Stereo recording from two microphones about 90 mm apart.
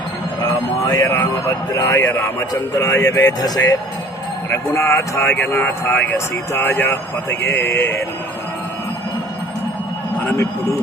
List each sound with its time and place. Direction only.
1.0 s a man's voice: 20° left (ahead or behind)
1.5 s speech: 35° left (ahead or behind)
4.4 s speech: 30° left (ahead or behind)
5.5 s a man's voice: 20° left (ahead or behind)
6.1 s a man's voice: 30° left (ahead or behind)